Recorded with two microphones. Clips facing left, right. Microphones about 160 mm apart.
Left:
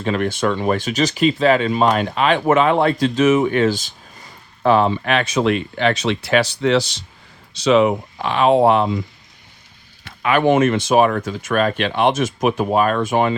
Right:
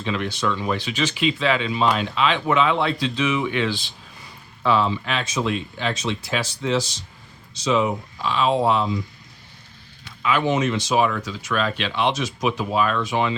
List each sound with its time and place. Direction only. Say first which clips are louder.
0.0 s speech: left 5 dB; 50° left (ahead or behind)